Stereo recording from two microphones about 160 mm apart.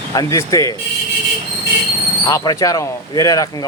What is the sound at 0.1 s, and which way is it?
Speech, 20° left (ahead or behind).